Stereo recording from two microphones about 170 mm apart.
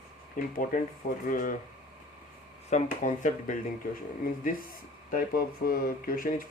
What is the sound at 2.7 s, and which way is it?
Speech, 50° left (ahead or behind).